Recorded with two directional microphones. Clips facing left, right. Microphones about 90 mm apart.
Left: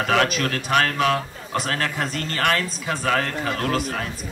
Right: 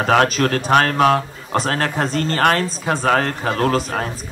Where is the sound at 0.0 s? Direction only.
35° right (ahead or behind).